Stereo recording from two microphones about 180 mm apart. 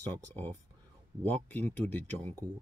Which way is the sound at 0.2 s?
10° left (ahead or behind).